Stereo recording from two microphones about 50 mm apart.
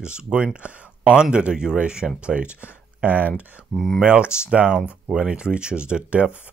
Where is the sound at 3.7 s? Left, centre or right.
Centre.